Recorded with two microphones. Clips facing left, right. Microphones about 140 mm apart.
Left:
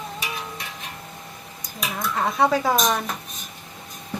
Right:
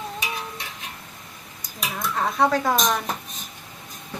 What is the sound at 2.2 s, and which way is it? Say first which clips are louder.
Speech: left 1 dB; centre (ahead or behind).